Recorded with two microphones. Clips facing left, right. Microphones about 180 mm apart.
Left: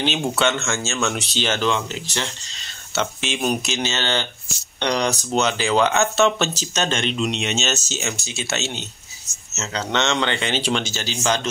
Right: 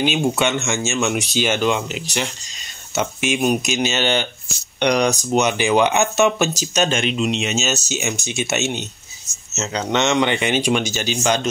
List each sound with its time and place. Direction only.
0.4 s speech: 15° right (ahead or behind)